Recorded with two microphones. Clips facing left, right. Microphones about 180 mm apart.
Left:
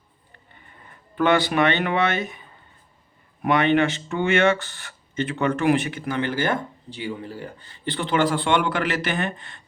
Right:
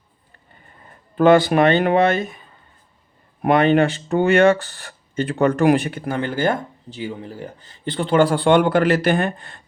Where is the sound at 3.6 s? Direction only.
35° right (ahead or behind).